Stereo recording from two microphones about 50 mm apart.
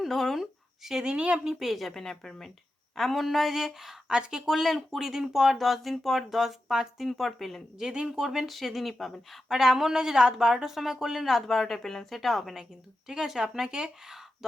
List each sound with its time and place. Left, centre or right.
0.0 s speech: centre
1.1 s a woman's voice: right
1.5 s speech: centre
1.9 s a woman's voice: centre
7.8 s speech: centre
9.5 s speech: centre
13.1 s speech: centre